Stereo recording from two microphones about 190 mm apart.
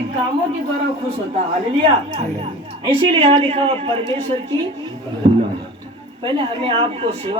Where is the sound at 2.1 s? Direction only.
30° right (ahead or behind).